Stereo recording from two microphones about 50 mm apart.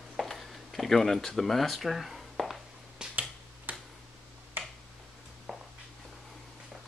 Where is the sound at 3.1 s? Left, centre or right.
Right.